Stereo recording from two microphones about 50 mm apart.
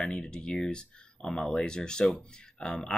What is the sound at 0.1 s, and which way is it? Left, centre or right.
Speech, centre.